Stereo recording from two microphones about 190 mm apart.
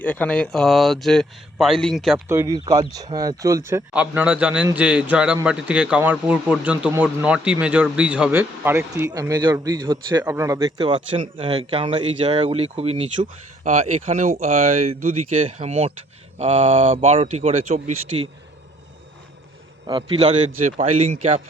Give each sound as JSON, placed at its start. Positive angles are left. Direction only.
{"t": 0.0, "sound": "speech", "side_deg": 10}
{"t": 2.1, "sound": "speech", "side_deg": -15}
{"t": 15.4, "sound": "speech", "side_deg": -35}
{"t": 19.9, "sound": "speech", "side_deg": -25}